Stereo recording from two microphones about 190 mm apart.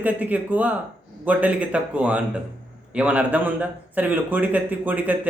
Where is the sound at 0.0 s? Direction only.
10° right (ahead or behind).